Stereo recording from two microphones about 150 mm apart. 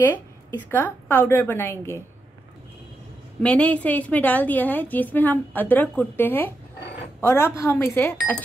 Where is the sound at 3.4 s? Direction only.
10° left (ahead or behind).